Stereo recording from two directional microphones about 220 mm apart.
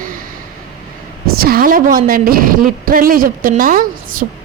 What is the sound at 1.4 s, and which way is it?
A woman's voice, 40° right (ahead or behind).